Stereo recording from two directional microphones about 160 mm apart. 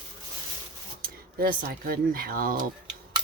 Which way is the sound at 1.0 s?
65° right (ahead or behind).